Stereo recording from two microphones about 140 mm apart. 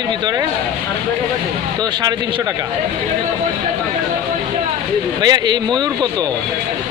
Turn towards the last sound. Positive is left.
turn(degrees=-30)  # may be behind; listen again after turning